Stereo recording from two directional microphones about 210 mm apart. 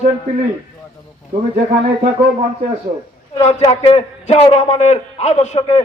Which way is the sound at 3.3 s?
30° left (ahead or behind).